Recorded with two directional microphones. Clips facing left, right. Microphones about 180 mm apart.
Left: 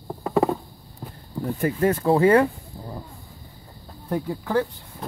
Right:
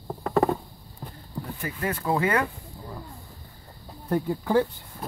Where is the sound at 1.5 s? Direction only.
40° left (ahead or behind).